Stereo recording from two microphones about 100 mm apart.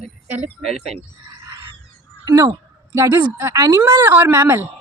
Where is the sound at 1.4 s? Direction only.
40° right (ahead or behind).